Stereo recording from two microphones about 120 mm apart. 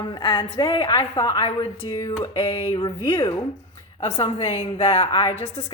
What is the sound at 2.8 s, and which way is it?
Speech, 35° left (ahead or behind).